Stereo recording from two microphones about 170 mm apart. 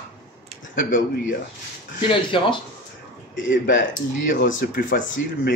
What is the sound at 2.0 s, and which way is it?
Speech, 30° left (ahead or behind).